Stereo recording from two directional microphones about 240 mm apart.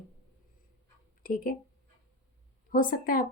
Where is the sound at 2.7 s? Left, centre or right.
Left.